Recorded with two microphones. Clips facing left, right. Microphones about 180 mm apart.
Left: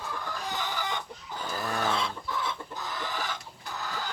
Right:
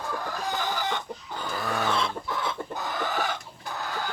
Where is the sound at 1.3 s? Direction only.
65° right (ahead or behind).